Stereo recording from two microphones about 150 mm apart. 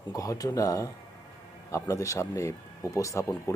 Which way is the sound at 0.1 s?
25° left (ahead or behind).